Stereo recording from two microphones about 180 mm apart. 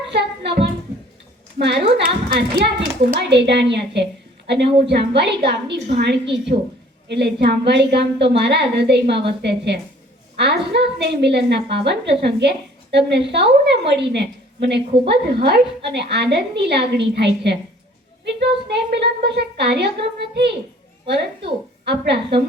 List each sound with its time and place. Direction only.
0.1 s music: 70° right (ahead or behind)
1.5 s a woman's voice: 65° right (ahead or behind)
3.1 s a woman's voice: 70° right (ahead or behind)
15.1 s a woman's voice: 60° right (ahead or behind)
15.8 s a woman's voice: 70° right (ahead or behind)